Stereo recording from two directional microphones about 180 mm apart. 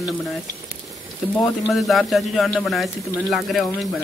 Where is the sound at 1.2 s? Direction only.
Centre (ahead or behind).